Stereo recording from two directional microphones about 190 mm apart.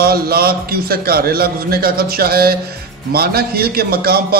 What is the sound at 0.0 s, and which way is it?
A man's voice, 55° right (ahead or behind).